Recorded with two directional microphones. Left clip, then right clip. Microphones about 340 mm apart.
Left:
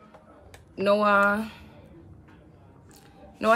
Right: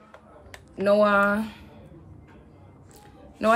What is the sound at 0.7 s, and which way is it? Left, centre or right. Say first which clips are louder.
Speech: right 1 dB; centre.